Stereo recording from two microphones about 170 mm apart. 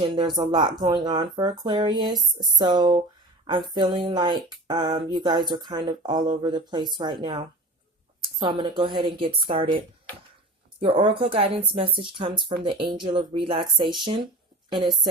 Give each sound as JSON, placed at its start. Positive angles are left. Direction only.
{"t": 0.2, "sound": "a sound", "side_deg": -25}
{"t": 10.8, "sound": "speech", "side_deg": -30}
{"t": 14.8, "sound": "a woman's voice", "side_deg": 0}